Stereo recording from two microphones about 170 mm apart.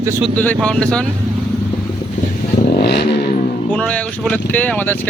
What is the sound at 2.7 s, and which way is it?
Vehicle, 70° left (ahead or behind).